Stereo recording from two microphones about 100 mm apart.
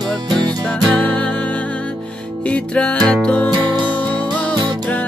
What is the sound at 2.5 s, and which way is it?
Music, 10° left (ahead or behind).